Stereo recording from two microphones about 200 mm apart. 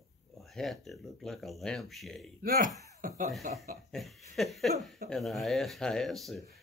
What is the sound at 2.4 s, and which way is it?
Speech, 40° right (ahead or behind).